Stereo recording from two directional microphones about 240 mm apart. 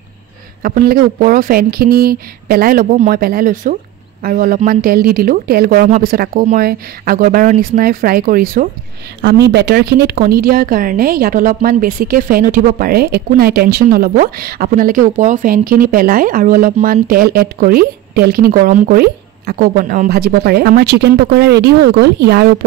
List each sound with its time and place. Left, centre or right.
0.6 s a woman's voice: right